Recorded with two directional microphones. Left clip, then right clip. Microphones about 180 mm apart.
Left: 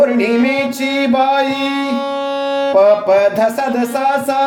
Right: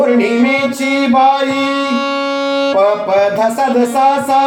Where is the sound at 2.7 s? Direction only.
60° left (ahead or behind).